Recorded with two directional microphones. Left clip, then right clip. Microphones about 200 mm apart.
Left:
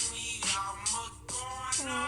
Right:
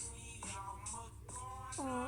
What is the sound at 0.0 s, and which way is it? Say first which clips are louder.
Music: left 16 dB; 40° left (ahead or behind).